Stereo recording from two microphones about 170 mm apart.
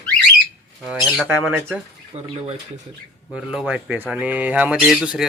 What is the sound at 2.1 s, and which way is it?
Speech, 40° right (ahead or behind).